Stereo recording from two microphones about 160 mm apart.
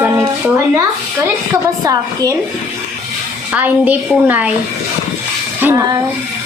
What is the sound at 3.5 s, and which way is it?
Speech, 10° right (ahead or behind).